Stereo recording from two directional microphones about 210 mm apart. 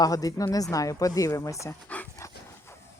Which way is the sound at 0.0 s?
15° left (ahead or behind).